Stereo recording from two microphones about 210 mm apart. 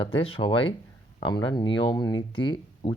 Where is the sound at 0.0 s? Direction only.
25° left (ahead or behind).